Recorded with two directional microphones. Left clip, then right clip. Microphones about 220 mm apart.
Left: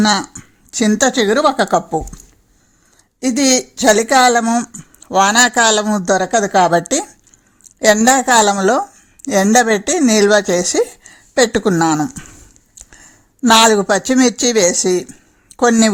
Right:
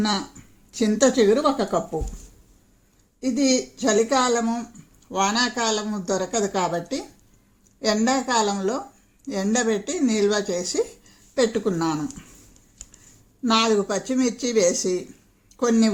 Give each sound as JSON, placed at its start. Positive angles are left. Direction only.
{"t": 0.0, "sound": "speech", "side_deg": 50}
{"t": 3.2, "sound": "speech", "side_deg": 50}
{"t": 13.4, "sound": "speech", "side_deg": 50}